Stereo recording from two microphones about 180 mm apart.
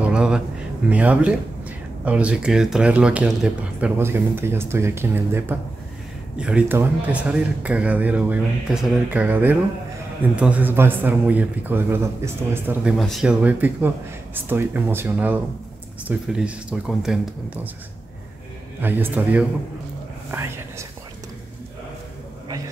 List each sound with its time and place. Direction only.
0.0 s a sound: 5° right (ahead or behind)
0.8 s a man's voice: 5° right (ahead or behind)
18.8 s a man's voice: 10° right (ahead or behind)
20.2 s whispering: 15° right (ahead or behind)